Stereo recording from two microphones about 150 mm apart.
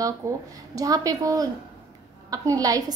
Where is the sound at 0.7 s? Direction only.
25° right (ahead or behind).